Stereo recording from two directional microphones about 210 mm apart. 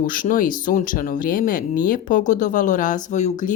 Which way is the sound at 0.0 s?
40° left (ahead or behind).